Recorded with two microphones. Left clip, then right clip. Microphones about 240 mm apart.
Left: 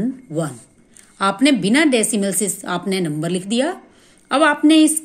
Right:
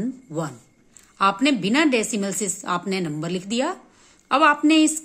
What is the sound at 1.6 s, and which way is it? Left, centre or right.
A woman's voice, right.